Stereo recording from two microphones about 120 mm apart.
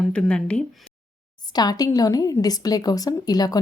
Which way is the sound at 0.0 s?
5° left (ahead or behind).